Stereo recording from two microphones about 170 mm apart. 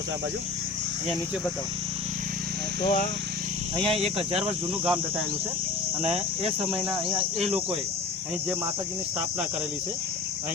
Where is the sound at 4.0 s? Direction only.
35° right (ahead or behind).